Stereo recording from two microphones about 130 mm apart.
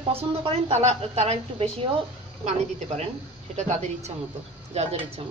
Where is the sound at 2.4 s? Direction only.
60° right (ahead or behind).